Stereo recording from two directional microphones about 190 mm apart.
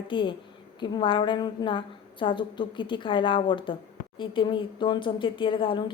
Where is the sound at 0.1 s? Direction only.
25° left (ahead or behind).